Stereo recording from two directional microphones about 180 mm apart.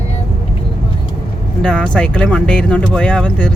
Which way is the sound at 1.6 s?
5° left (ahead or behind).